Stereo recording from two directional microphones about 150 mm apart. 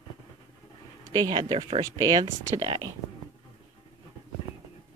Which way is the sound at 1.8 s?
25° right (ahead or behind).